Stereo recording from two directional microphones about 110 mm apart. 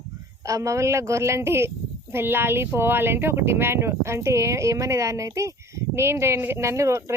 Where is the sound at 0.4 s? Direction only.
30° right (ahead or behind).